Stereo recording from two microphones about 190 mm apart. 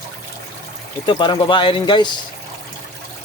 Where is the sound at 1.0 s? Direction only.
25° left (ahead or behind).